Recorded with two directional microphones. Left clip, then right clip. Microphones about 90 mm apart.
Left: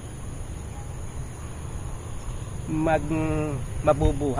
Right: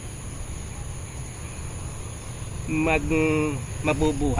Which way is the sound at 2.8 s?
40° left (ahead or behind).